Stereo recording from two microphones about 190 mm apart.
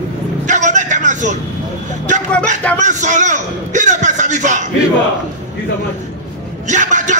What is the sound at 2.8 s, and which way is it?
Speech, 40° right (ahead or behind).